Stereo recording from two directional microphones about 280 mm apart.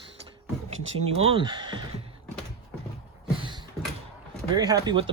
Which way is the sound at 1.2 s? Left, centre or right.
Centre.